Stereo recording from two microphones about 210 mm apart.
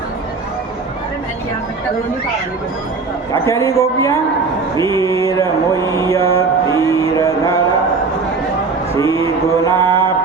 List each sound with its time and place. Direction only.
3.4 s speech: 15° left (ahead or behind)
4.8 s mantra: 15° left (ahead or behind)
9.0 s music: 15° left (ahead or behind)
9.8 s music: 25° right (ahead or behind)